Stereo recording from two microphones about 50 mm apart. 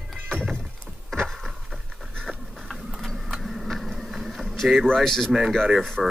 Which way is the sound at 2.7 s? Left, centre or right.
Centre.